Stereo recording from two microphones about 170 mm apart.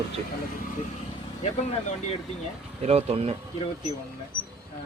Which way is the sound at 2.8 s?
40° right (ahead or behind).